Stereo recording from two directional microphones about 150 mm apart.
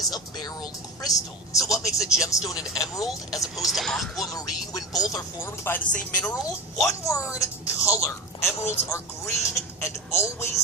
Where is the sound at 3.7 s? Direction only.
Centre (ahead or behind).